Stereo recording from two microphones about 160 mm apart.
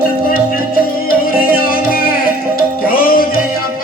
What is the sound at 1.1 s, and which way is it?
Music, 65° left (ahead or behind).